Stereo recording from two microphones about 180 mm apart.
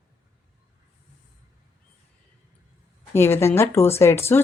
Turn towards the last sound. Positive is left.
turn(degrees=15)  # may be behind; listen again after turning